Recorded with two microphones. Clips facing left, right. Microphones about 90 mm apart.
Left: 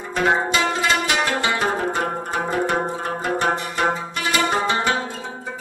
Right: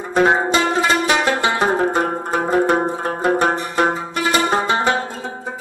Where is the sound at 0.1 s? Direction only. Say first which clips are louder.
Right 4 dB; 35° right (ahead or behind).